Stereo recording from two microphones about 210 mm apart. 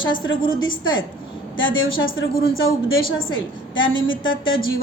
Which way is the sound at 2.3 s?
45° left (ahead or behind).